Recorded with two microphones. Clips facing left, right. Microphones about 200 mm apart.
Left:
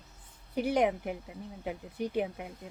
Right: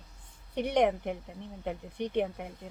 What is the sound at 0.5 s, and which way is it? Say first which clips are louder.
Speech: right 1 dB; 5° left (ahead or behind).